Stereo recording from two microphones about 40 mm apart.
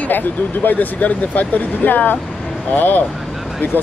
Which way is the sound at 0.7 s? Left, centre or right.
Left.